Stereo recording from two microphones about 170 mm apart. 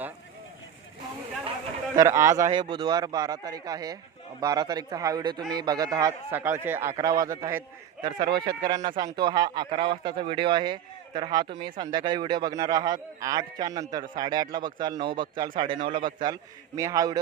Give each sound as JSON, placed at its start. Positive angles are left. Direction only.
{"t": 2.0, "sound": "speech", "side_deg": -15}